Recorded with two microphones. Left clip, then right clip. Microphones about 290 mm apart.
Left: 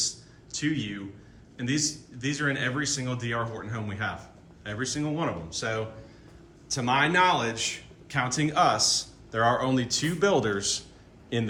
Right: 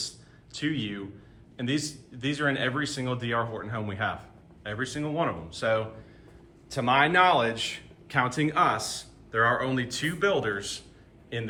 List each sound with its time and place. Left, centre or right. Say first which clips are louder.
0.5 s a man's voice: left 1 dB; centre; by 11.5 s left